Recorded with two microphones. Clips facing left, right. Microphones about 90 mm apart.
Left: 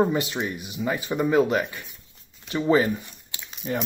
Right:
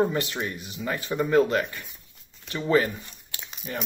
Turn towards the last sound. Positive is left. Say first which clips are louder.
# left 6 dB
turn(degrees=5)  # may be behind; listen again after turning